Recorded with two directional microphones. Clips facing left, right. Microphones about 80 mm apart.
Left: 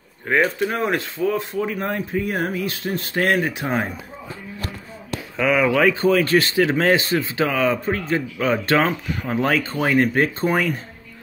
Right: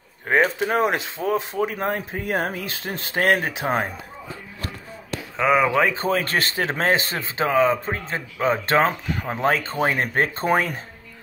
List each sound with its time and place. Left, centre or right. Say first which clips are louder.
0.3 s speech: even; right
5.4 s speech: left 1 dB; right